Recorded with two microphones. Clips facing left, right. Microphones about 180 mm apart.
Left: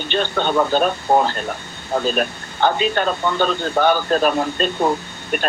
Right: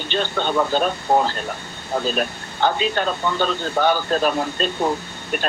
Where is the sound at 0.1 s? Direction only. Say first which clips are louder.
Left 2 dB; 60° left (ahead or behind).